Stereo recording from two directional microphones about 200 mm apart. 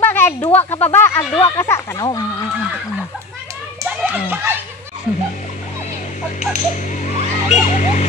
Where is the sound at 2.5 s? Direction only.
5° right (ahead or behind).